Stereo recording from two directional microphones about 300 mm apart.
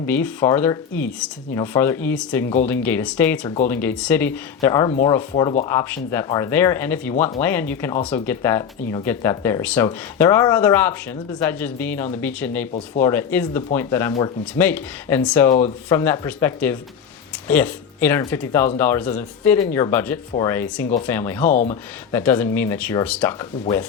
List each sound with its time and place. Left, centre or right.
0.0 s speech: centre
21.4 s speech: left
22.1 s speech: centre